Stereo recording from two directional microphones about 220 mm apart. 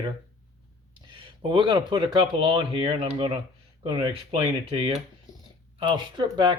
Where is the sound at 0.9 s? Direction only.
25° right (ahead or behind).